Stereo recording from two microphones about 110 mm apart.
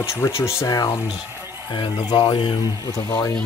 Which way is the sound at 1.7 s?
45° left (ahead or behind).